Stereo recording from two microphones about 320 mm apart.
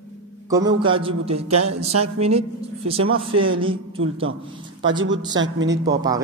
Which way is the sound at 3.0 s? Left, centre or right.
Right.